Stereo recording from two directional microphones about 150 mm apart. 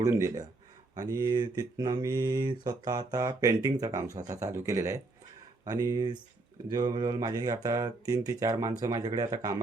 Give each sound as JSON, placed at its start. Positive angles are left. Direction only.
{"t": 0.0, "sound": "mantra", "side_deg": -20}